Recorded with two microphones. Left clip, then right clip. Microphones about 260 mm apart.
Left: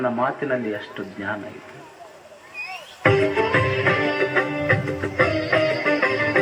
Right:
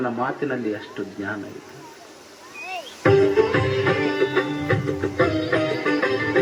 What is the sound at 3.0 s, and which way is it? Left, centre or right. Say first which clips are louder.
Music: right 2 dB; centre.